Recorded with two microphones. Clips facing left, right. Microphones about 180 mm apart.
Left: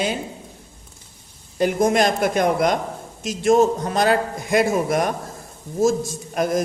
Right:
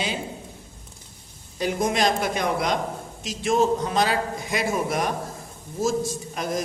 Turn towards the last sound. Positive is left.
turn(degrees=50)  # may be behind; listen again after turning